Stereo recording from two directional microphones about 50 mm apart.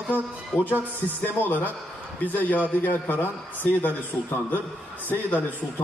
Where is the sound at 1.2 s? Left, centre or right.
Left.